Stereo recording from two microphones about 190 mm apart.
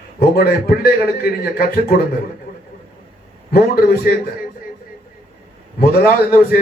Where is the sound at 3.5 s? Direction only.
55° left (ahead or behind).